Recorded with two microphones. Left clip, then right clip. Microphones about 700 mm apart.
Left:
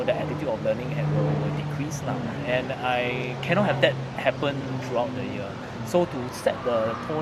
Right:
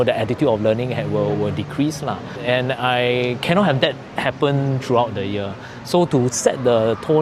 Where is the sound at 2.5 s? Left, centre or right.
Right.